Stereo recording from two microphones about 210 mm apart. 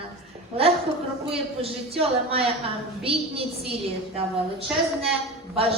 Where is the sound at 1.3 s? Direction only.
25° right (ahead or behind).